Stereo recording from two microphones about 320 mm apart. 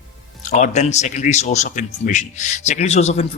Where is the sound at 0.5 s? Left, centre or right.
Left.